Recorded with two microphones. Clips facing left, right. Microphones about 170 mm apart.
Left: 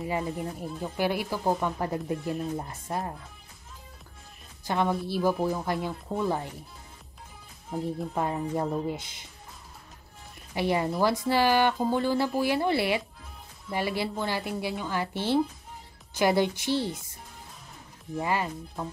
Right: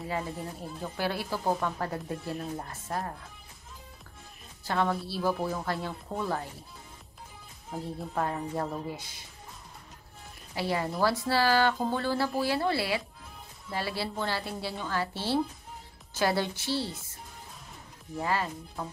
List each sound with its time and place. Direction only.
0.0 s a woman's voice: 15° left (ahead or behind)
4.6 s a woman's voice: 15° left (ahead or behind)
7.7 s speech: centre (ahead or behind)
8.1 s a woman's voice: 15° left (ahead or behind)
10.5 s a woman's voice: 20° left (ahead or behind)
18.2 s a woman's voice: 15° left (ahead or behind)